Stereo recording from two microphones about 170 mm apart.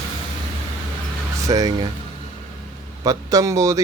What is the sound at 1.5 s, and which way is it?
Speech, 25° right (ahead or behind).